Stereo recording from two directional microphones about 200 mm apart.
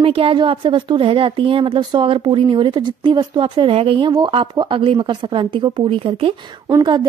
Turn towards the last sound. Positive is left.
turn(degrees=-20)  # may be behind; listen again after turning